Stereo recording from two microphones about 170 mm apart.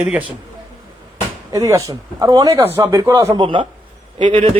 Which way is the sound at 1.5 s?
20° right (ahead or behind).